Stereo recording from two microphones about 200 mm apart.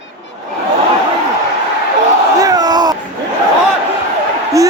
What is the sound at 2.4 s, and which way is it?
Crowd, 20° right (ahead or behind).